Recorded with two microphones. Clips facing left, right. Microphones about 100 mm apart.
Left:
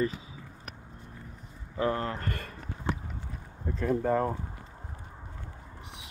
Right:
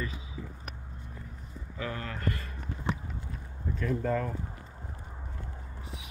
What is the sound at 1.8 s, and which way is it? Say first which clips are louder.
Speech: left 8 dB; 35° left (ahead or behind).